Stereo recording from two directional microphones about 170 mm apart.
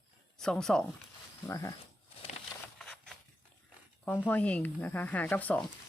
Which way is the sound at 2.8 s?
5° left (ahead or behind).